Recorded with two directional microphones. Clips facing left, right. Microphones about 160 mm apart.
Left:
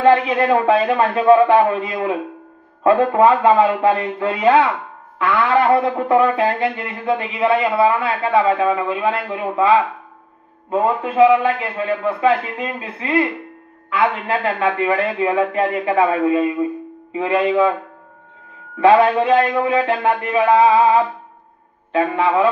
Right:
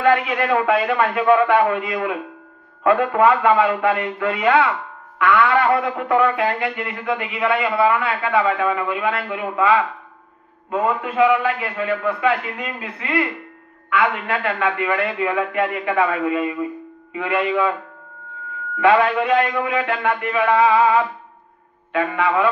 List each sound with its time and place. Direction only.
0.0 s speech: 30° left (ahead or behind)
18.8 s speech: 30° left (ahead or behind)